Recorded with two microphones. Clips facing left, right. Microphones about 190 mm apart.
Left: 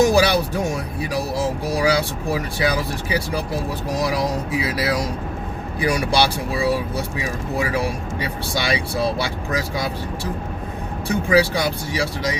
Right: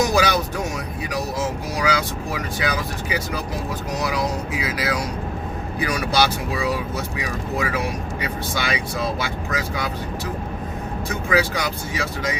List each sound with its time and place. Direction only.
0.1 s music: 35° left (ahead or behind)
1.1 s speech: 30° left (ahead or behind)
4.6 s speech: 30° left (ahead or behind)
11.1 s speech: 30° left (ahead or behind)